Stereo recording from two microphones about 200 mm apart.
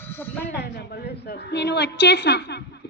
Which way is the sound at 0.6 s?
55° left (ahead or behind).